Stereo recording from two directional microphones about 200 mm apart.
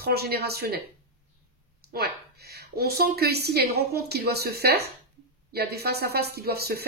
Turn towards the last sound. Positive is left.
turn(degrees=-50)  # may be behind; listen again after turning